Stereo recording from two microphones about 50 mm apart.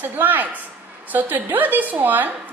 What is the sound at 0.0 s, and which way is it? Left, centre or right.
A woman's voice, right.